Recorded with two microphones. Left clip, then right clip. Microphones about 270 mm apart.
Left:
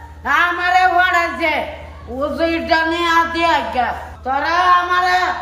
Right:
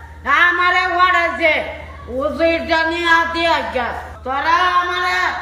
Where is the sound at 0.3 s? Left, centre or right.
Centre.